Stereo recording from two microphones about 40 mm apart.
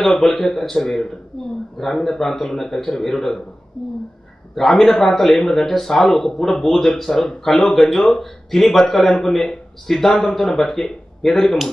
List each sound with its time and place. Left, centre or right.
0.0 s a man's voice: centre
4.6 s a man's voice: centre